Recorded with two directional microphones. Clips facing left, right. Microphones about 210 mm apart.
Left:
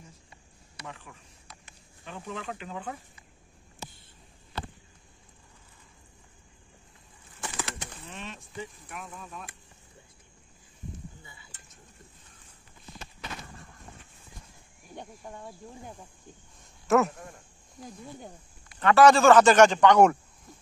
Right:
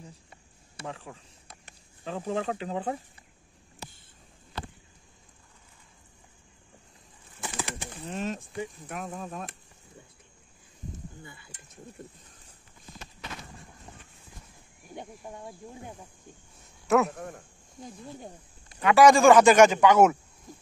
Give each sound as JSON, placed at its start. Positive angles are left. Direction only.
{"t": 0.8, "sound": "speech", "side_deg": -30}
{"t": 8.1, "sound": "speech", "side_deg": -40}
{"t": 15.0, "sound": "speech", "side_deg": -10}
{"t": 16.8, "sound": "a man's voice", "side_deg": 0}
{"t": 17.1, "sound": "speech", "side_deg": -70}
{"t": 17.8, "sound": "speech", "side_deg": 0}
{"t": 18.8, "sound": "speech", "side_deg": -10}